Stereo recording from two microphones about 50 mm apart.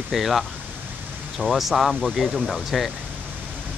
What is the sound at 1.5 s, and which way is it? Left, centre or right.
Speech, centre.